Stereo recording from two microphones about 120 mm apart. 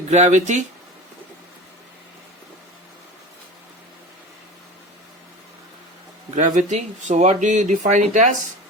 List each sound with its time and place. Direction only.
0.1 s speech: 80° right
6.3 s speech: 90° right